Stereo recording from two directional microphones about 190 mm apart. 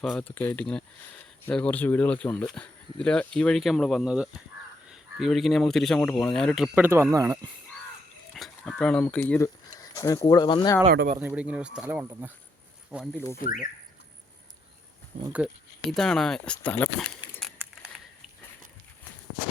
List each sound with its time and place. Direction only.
0.0 s speech: 5° left (ahead or behind)
6.7 s speech: 10° right (ahead or behind)
8.3 s speech: centre (ahead or behind); by 10.8 s 20° left (ahead or behind)
11.2 s speech: 5° right (ahead or behind)
13.1 s speech: 15° left (ahead or behind)
13.4 s speech: 45° left (ahead or behind)
15.9 s speech: centre (ahead or behind)